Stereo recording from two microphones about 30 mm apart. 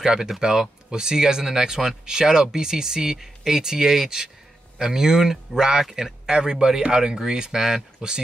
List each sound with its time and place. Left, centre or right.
0.0 s speech: right